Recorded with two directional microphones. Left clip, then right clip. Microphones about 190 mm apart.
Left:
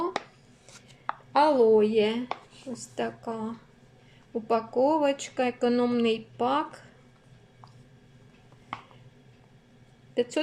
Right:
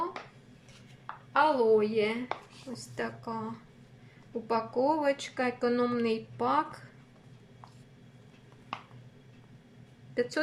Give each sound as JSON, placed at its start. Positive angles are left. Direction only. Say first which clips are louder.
{"t": 0.1, "sound": "chopping", "louder": "left 10 dB", "side_deg": 55}
{"t": 1.3, "sound": "speech", "louder": "left 4 dB", "side_deg": 20}
{"t": 10.2, "sound": "speech", "louder": "left 3 dB", "side_deg": 15}